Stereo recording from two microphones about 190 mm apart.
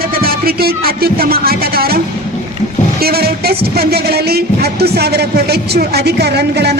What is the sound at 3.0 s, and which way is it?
Music, 55° right (ahead or behind).